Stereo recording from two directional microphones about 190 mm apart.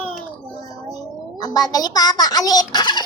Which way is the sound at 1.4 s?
20° left (ahead or behind).